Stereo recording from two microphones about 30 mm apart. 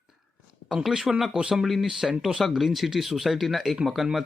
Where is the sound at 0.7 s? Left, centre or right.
Centre.